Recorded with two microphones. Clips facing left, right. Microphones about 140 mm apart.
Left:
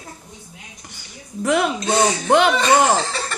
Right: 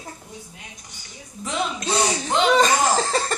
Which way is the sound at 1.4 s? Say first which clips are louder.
Left 8 dB; 65° left (ahead or behind).